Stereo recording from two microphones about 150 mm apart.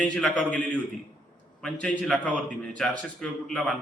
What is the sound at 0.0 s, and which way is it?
A man's voice, 5° left (ahead or behind).